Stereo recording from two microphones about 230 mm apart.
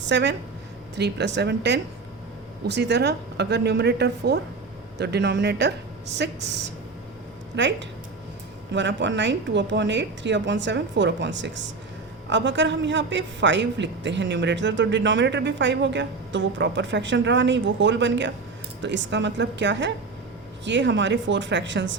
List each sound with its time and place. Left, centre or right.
0.0 s a man's voice: right